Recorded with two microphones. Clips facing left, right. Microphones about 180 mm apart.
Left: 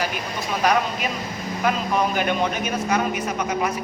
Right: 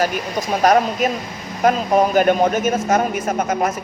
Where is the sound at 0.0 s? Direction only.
45° right (ahead or behind).